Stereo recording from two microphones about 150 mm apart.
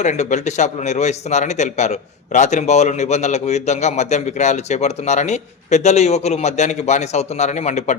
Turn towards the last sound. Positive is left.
turn(degrees=50)  # may be behind; listen again after turning